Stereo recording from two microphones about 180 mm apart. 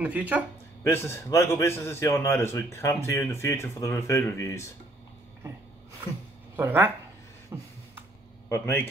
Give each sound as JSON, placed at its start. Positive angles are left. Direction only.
{"t": 0.0, "sound": "speech", "side_deg": -5}
{"t": 0.8, "sound": "a man's voice", "side_deg": 15}
{"t": 6.5, "sound": "speech", "side_deg": -10}
{"t": 7.5, "sound": "beatboxing", "side_deg": -15}
{"t": 8.5, "sound": "a man's voice", "side_deg": 15}